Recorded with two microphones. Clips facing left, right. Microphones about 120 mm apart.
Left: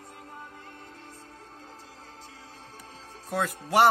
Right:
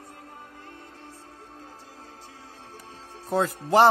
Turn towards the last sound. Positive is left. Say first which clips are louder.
# right 3 dB
turn(degrees=-30)  # may be behind; listen again after turning